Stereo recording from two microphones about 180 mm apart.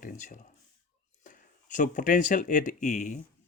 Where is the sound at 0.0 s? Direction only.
45° left (ahead or behind).